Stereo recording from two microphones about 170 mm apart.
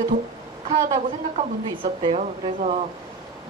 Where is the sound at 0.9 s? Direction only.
35° right (ahead or behind).